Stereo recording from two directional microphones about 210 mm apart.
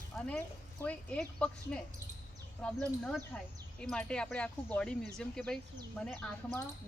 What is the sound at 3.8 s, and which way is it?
Speech, 5° left (ahead or behind).